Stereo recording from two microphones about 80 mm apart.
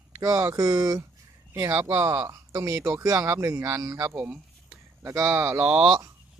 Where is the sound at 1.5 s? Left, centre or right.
Right.